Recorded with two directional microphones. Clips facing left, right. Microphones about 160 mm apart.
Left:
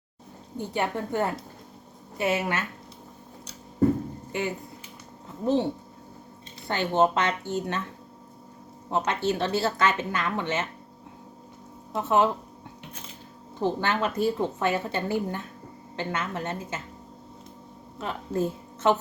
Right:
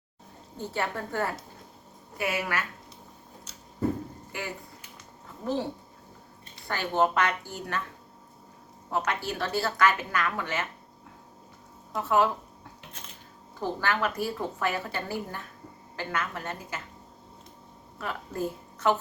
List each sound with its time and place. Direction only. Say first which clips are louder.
0.6 s a woman's voice: left 3 dB; 15° left (ahead or behind)
4.3 s speech: left 8 dB; 20° left (ahead or behind)
6.7 s a woman's voice: left 3 dB; 20° left (ahead or behind)
8.9 s a woman's voice: left 4 dB; 25° left (ahead or behind)
11.9 s a woman's voice: left 2 dB; 20° left (ahead or behind)
13.6 s a woman's voice: left 3 dB; 25° left (ahead or behind)
17.9 s a woman's voice: left 5 dB; 25° left (ahead or behind)